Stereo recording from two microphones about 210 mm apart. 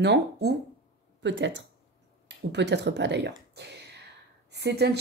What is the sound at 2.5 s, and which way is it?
A woman's voice, 55° right (ahead or behind).